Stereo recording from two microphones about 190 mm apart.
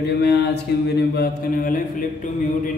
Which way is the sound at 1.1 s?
50° left (ahead or behind).